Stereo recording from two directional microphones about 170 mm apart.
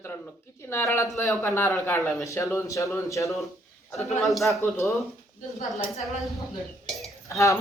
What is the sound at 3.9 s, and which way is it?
Speech, centre (ahead or behind).